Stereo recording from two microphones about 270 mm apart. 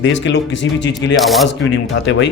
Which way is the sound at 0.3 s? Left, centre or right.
Left.